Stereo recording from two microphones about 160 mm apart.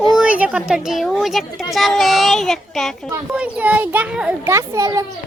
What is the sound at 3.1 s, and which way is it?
A child's voice, 10° right (ahead or behind).